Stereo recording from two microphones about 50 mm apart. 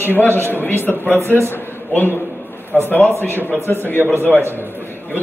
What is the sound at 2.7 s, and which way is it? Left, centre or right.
Speech, left.